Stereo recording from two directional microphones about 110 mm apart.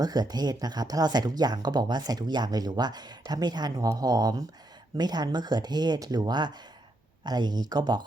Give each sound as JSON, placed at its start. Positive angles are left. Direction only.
{"t": 0.0, "sound": "speech", "side_deg": -35}